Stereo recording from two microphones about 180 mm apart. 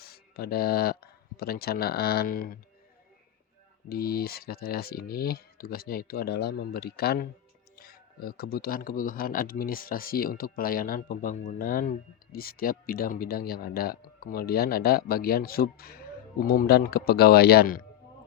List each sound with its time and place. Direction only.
0.3 s speech: 60° left (ahead or behind)
3.8 s speech: 60° left (ahead or behind)